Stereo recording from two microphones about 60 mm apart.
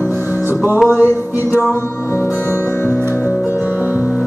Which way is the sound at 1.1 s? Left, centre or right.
Left.